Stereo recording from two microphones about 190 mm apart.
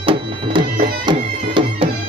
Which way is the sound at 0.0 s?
30° right (ahead or behind).